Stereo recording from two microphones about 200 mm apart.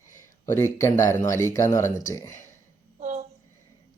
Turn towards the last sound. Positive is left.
turn(degrees=-35)  # may be behind; listen again after turning